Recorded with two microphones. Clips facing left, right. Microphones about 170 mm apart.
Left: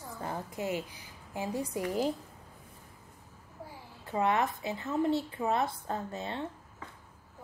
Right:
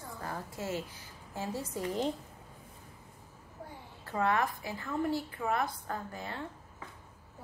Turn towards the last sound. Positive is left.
turn(degrees=25)  # may be behind; listen again after turning